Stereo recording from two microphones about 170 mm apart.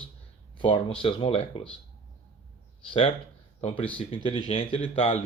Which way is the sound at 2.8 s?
30° left (ahead or behind).